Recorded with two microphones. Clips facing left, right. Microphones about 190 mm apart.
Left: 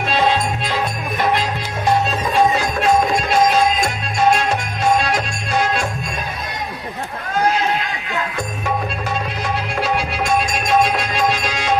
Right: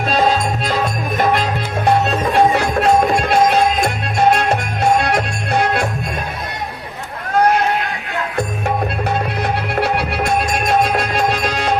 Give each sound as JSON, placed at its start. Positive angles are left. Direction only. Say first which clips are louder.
{"t": 0.1, "sound": "music", "louder": "right 2 dB", "side_deg": -45}
{"t": 1.9, "sound": "music", "louder": "right 2 dB", "side_deg": -60}
{"t": 7.3, "sound": "a sound", "louder": "right 4 dB", "side_deg": -60}
{"t": 8.4, "sound": "music", "louder": "right 7 dB", "side_deg": -60}